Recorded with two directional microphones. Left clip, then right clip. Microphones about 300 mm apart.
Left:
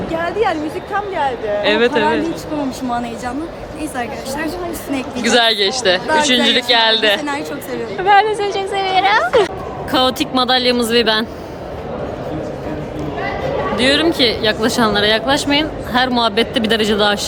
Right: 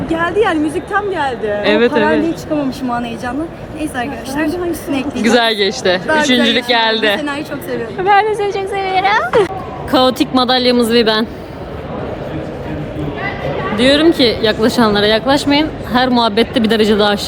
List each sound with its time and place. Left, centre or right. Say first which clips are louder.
0.2 s a sound: right 3 dB; right
0.9 s speech: right 2 dB; right
1.6 s speech: right 2 dB; centre
5.2 s a woman's voice: right 1 dB; centre
13.7 s a woman's voice: right 4 dB; centre